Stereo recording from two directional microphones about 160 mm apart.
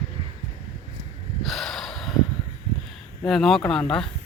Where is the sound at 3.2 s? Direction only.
Centre (ahead or behind).